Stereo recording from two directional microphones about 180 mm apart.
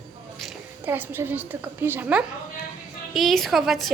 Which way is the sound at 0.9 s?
10° right (ahead or behind).